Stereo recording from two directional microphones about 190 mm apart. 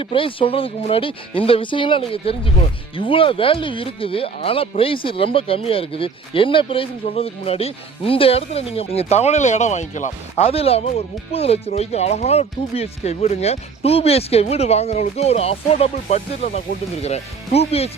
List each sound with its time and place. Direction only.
0.0 s speech: 30° left (ahead or behind)